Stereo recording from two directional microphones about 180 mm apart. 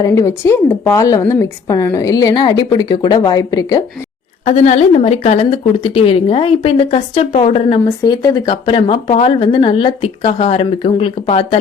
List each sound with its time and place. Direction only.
0.0 s a woman's voice: 15° left (ahead or behind)
4.4 s a woman's voice: 40° left (ahead or behind)
8.0 s a woman's voice: 20° left (ahead or behind)